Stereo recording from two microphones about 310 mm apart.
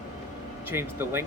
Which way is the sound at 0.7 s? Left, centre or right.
Centre.